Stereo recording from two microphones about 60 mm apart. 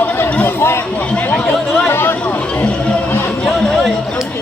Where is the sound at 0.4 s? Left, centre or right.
Left.